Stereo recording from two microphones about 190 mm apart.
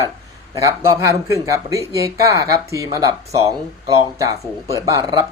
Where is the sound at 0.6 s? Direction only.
15° right (ahead or behind).